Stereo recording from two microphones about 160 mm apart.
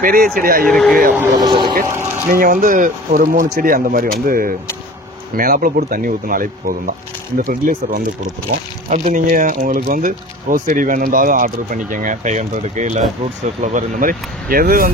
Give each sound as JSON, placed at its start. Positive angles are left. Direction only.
{"t": 0.0, "sound": "speech", "side_deg": -65}
{"t": 0.7, "sound": "speech", "side_deg": 5}
{"t": 1.3, "sound": "speech", "side_deg": -25}
{"t": 2.3, "sound": "speech", "side_deg": -60}